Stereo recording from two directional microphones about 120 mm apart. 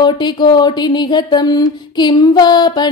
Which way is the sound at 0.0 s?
40° left (ahead or behind).